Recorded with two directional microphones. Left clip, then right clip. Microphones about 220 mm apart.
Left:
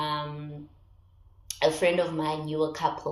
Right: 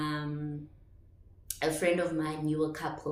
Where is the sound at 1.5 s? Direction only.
20° right (ahead or behind).